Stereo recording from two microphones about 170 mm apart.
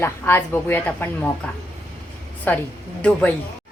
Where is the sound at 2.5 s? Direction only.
10° left (ahead or behind).